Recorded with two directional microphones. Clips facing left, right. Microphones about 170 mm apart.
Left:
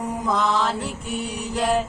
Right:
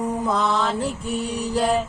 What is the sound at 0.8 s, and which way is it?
Mantra, 35° right (ahead or behind).